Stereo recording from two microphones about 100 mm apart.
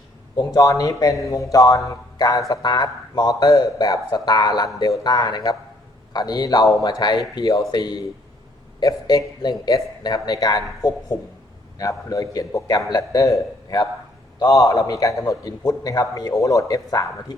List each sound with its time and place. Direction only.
0.3 s a man's voice: 35° left (ahead or behind)